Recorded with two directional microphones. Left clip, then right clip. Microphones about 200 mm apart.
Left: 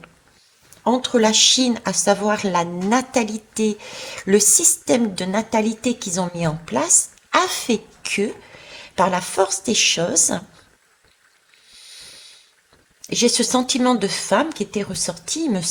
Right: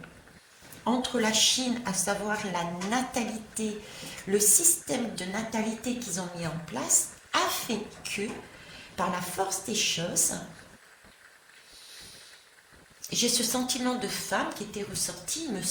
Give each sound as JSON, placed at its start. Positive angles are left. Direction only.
{"t": 0.9, "sound": "speech", "side_deg": 40}
{"t": 13.0, "sound": "speech", "side_deg": 45}